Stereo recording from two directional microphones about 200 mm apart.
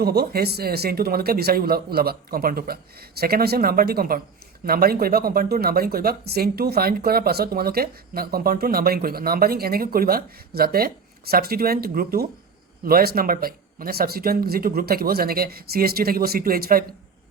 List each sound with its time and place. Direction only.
0.0 s speech: 50° right (ahead or behind)